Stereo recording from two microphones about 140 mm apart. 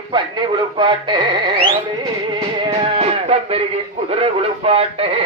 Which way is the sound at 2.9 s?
45° right (ahead or behind).